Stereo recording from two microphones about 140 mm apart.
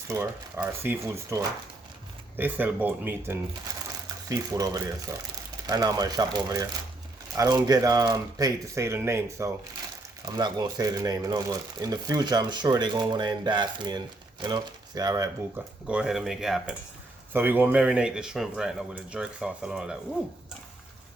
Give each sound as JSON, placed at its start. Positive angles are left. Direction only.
{"t": 0.1, "sound": "speech", "side_deg": -15}
{"t": 10.3, "sound": "speech", "side_deg": -30}
{"t": 15.9, "sound": "speech", "side_deg": -5}
{"t": 17.3, "sound": "speech", "side_deg": -15}